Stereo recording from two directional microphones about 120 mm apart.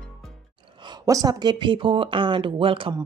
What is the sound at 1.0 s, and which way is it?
A woman's voice, 30° right (ahead or behind).